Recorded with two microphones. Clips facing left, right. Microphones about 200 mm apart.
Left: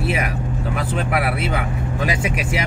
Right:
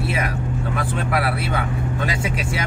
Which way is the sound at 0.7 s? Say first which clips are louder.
Left 1 dB; 20° left (ahead or behind).